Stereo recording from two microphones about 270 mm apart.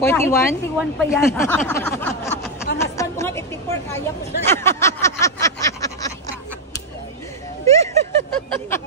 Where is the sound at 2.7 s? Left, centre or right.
Centre.